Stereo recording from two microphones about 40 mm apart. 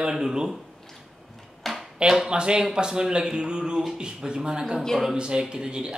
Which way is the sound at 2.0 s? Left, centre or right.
Centre.